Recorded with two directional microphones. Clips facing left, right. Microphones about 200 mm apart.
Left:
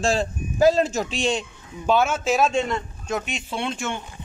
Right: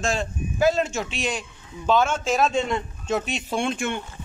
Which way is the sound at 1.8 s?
10° left (ahead or behind).